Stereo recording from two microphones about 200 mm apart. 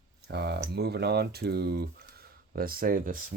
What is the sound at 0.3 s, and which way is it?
Speech, 55° right (ahead or behind).